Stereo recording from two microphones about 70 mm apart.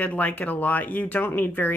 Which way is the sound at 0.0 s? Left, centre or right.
Left.